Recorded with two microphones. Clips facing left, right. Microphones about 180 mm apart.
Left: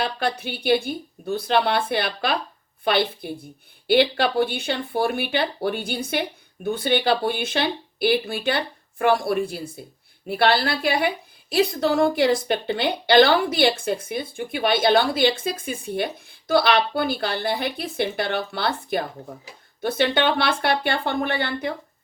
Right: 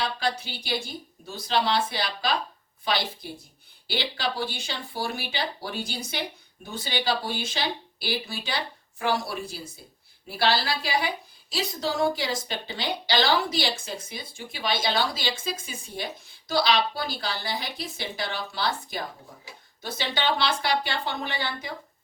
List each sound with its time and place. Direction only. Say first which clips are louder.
0.0 s a woman's voice: left 4 dB; 60° left (ahead or behind)